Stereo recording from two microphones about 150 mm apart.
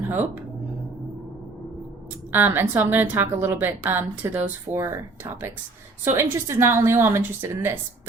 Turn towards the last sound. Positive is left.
turn(degrees=-15)  # may be behind; listen again after turning